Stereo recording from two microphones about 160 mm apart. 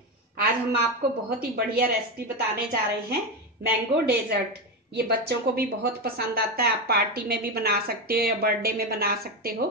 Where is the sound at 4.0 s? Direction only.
90° right.